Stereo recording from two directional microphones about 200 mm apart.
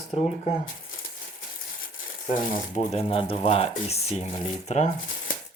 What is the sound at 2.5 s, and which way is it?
Speech, 35° left (ahead or behind).